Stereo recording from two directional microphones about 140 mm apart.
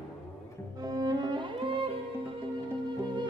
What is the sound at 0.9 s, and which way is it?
Music, 30° right (ahead or behind).